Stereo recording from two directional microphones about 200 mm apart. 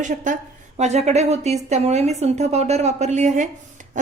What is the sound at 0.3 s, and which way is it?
A woman's voice, 40° right (ahead or behind).